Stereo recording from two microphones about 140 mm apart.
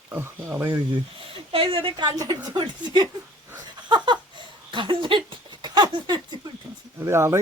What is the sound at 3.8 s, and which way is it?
Laughter, 35° right (ahead or behind).